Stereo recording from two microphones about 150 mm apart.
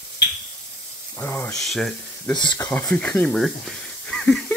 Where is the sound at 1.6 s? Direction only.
Centre (ahead or behind).